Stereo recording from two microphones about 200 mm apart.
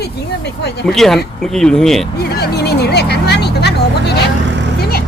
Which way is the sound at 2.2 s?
55° left (ahead or behind).